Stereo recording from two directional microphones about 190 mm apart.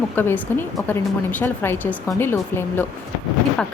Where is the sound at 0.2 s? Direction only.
10° left (ahead or behind).